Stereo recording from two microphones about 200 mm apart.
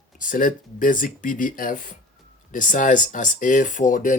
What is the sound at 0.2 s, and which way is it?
Speech, 40° left (ahead or behind).